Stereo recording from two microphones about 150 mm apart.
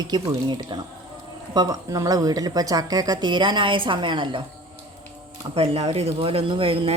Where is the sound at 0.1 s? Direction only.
30° right (ahead or behind).